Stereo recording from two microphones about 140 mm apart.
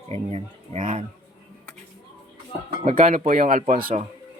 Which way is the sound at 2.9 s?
65° right (ahead or behind).